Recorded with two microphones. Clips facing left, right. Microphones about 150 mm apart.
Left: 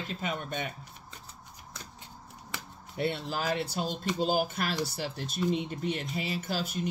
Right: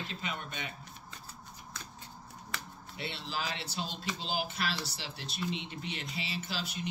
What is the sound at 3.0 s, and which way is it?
Speech, 50° left (ahead or behind).